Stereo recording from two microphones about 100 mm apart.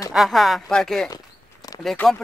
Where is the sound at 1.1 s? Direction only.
40° left (ahead or behind).